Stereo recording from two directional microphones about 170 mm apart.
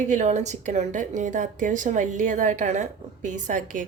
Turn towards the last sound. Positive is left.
turn(degrees=-50)  # may be behind; listen again after turning